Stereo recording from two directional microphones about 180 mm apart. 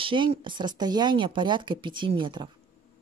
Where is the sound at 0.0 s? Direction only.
30° right (ahead or behind).